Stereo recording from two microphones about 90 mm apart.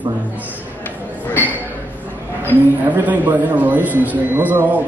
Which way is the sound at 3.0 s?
20° right (ahead or behind).